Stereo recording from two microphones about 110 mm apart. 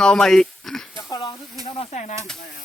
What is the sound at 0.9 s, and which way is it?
Snake, 25° left (ahead or behind).